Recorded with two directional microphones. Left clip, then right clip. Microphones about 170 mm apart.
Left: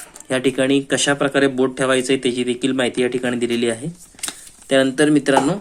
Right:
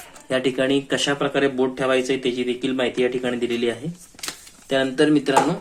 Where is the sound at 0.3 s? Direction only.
35° left (ahead or behind).